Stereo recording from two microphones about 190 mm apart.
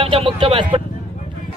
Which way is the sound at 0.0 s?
30° right (ahead or behind).